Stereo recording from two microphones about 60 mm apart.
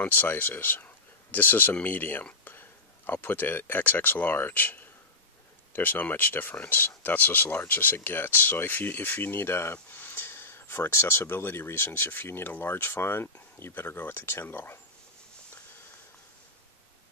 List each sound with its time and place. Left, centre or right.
0.0 s speech: left
9.8 s speech: left